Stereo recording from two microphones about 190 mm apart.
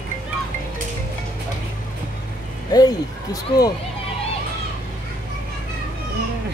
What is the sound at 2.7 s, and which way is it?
Speech, 20° left (ahead or behind).